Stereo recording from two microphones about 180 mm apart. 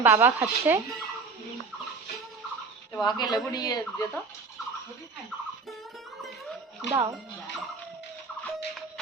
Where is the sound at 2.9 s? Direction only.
25° left (ahead or behind).